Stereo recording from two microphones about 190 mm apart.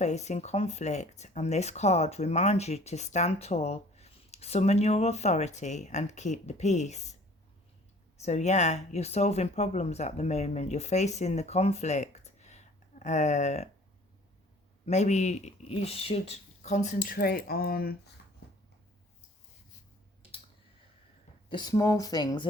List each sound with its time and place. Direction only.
0.0 s speech: 35° left (ahead or behind)
8.2 s speech: 35° left (ahead or behind)
14.8 s speech: 35° left (ahead or behind)
18.4 s a sound: 60° left (ahead or behind)
21.5 s speech: 20° left (ahead or behind)